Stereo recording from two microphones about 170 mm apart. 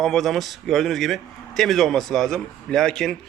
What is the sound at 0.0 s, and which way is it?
A man's voice, centre (ahead or behind).